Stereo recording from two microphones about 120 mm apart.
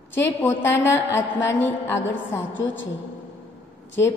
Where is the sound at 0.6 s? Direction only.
20° left (ahead or behind).